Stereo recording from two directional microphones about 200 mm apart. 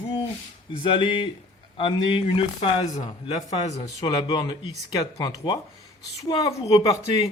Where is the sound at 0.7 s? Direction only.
25° left (ahead or behind).